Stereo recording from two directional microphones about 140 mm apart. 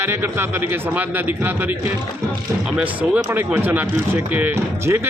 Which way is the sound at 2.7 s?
10° right (ahead or behind).